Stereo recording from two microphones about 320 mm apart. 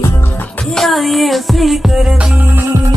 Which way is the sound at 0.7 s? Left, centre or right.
Centre.